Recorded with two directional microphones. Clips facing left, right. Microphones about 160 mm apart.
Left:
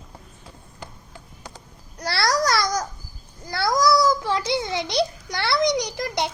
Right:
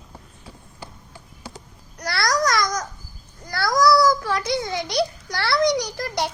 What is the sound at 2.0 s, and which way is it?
Babbling, 30° left (ahead or behind).